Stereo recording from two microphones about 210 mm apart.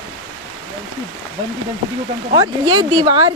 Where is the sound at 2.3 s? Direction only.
20° right (ahead or behind).